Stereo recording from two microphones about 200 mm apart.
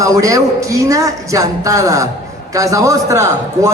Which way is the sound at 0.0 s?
15° right (ahead or behind).